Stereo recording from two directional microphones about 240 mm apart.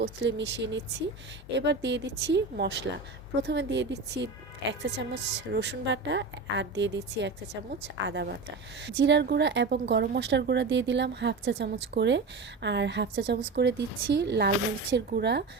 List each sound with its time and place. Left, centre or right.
0.0 s a woman's voice: right